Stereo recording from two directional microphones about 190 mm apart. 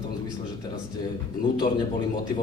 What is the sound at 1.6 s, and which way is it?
Speech, 25° left (ahead or behind).